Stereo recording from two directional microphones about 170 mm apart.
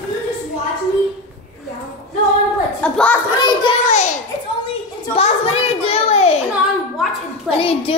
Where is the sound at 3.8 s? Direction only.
45° left (ahead or behind).